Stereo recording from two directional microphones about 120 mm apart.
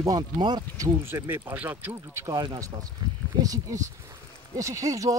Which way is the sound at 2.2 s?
35° right (ahead or behind).